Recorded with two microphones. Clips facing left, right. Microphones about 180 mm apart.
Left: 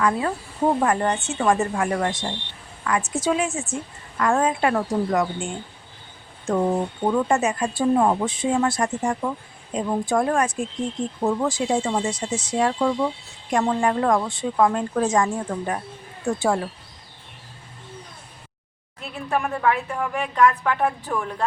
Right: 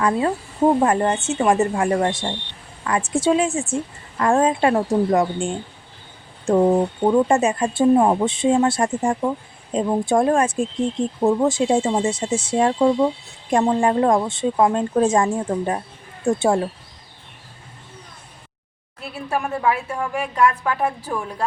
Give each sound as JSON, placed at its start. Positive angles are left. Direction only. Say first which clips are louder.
{"t": 0.0, "sound": "speech", "louder": "right 3 dB", "side_deg": -25}
{"t": 7.0, "sound": "speech", "louder": "right 3 dB", "side_deg": -20}
{"t": 19.1, "sound": "a woman's voice", "louder": "even", "side_deg": -10}